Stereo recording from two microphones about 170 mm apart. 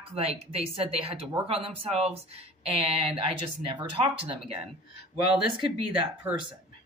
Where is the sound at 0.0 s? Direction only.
35° right (ahead or behind).